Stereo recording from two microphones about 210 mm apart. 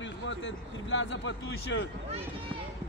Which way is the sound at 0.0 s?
60° left (ahead or behind).